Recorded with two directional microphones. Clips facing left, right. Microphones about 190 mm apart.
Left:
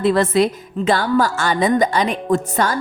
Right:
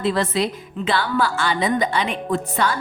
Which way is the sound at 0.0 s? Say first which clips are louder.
Left 6 dB; 50° left (ahead or behind).